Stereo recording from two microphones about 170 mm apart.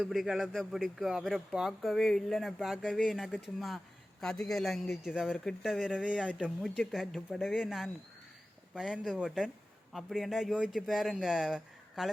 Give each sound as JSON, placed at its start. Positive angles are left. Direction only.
{"t": 0.0, "sound": "a man's voice", "side_deg": 0}